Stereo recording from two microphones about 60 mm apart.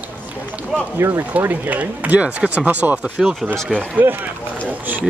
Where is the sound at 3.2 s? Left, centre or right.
Centre.